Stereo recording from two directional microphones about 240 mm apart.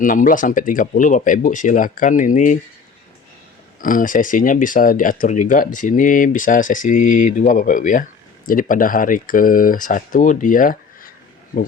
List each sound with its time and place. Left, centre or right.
0.0 s speech: left
3.8 s speech: left